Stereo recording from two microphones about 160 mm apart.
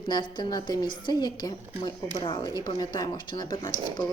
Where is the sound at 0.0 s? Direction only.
30° left (ahead or behind).